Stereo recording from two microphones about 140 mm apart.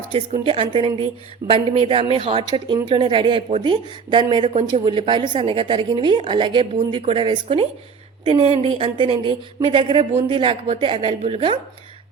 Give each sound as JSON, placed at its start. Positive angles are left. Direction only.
{"t": 0.4, "sound": "a woman's voice", "side_deg": -40}
{"t": 11.2, "sound": "speech", "side_deg": -50}